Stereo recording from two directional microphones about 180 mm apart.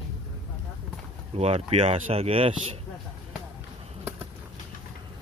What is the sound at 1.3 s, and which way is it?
Speech, 35° right (ahead or behind).